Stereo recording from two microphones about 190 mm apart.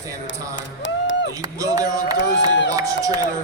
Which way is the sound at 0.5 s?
70° left (ahead or behind).